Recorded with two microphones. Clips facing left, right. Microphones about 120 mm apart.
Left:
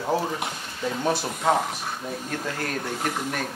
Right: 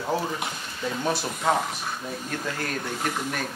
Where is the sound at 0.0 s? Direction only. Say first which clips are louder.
Left 2 dB; 25° left (ahead or behind).